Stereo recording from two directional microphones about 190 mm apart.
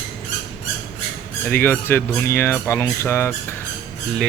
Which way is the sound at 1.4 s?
10° left (ahead or behind).